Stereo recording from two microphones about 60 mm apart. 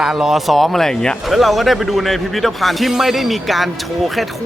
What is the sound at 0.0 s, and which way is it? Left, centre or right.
Speech, centre.